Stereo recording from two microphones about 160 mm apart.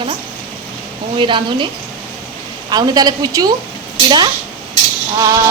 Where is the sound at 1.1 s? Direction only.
30° right (ahead or behind).